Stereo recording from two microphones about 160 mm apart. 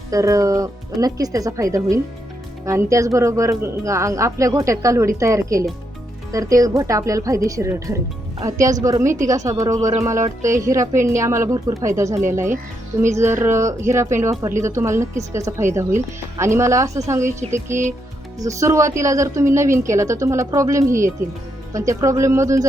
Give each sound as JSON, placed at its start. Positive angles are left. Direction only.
{"t": 0.1, "sound": "a woman's voice", "side_deg": -20}